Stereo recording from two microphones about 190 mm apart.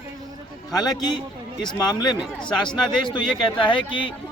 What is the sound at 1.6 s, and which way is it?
Speech, 25° left (ahead or behind).